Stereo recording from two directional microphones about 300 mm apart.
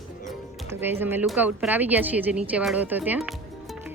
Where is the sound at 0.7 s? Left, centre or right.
Centre.